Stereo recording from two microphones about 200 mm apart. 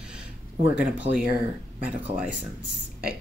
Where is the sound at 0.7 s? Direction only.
5° right (ahead or behind).